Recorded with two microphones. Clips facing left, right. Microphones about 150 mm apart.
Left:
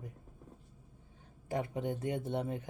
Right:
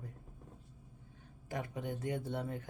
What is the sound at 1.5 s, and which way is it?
Speech, 25° left (ahead or behind).